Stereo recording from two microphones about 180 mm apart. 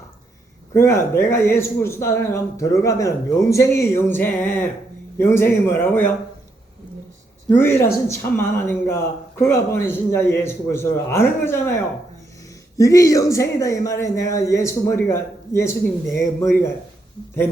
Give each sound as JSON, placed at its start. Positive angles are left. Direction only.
{"t": 0.7, "sound": "speech", "side_deg": 15}
{"t": 7.5, "sound": "speech", "side_deg": 10}